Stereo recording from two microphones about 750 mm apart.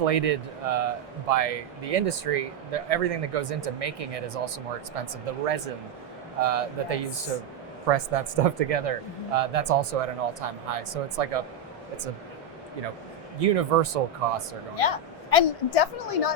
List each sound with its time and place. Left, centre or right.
0.0 s speech: right
13.4 s speech: right
14.8 s a woman's voice: left